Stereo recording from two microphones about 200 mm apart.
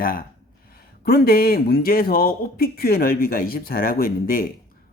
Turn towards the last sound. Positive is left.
turn(degrees=45)  # may be behind; listen again after turning